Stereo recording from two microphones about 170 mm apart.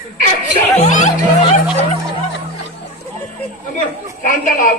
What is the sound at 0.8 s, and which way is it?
Speech, 45° left (ahead or behind).